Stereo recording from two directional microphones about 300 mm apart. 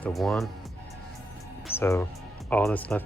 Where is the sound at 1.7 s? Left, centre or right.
Centre.